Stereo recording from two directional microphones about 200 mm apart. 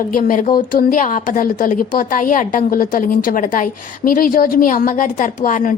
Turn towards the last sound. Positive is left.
turn(degrees=40)  # may be behind; listen again after turning